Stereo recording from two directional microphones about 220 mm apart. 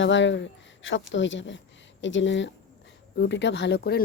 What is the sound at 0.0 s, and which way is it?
Speech, 55° left (ahead or behind).